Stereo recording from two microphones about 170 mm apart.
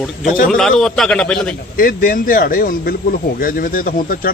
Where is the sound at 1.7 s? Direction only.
55° left (ahead or behind).